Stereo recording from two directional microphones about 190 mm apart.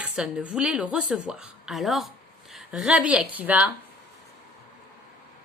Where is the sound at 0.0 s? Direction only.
5° right (ahead or behind).